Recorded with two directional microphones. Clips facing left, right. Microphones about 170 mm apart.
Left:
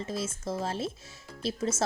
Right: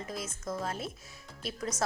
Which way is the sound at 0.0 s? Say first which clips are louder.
Left 5 dB; 25° left (ahead or behind).